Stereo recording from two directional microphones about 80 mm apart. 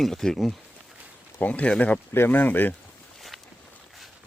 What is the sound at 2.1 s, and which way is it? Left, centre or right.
Speech, left.